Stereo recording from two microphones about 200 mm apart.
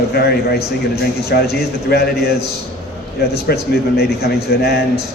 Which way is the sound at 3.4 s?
55° left (ahead or behind).